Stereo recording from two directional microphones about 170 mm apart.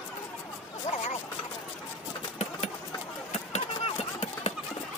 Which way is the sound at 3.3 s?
40° left (ahead or behind).